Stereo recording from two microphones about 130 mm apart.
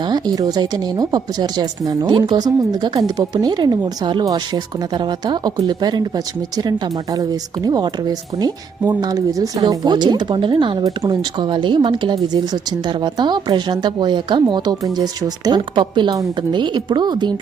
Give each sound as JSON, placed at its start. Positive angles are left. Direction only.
{"t": 0.0, "sound": "speech", "side_deg": -30}